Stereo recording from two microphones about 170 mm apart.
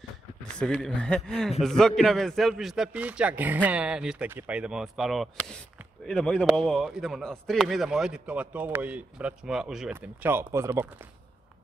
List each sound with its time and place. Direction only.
0.6 s a man's voice: 5° left (ahead or behind); by 11.1 s 15° right (ahead or behind)